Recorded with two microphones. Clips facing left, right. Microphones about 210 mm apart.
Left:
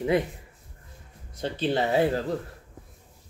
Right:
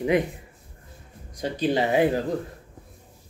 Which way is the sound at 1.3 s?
15° right (ahead or behind).